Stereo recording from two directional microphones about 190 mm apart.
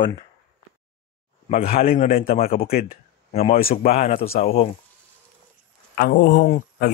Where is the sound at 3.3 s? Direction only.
30° left (ahead or behind).